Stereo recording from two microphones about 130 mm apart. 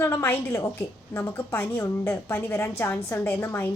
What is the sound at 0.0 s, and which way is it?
A woman's voice, 15° left (ahead or behind).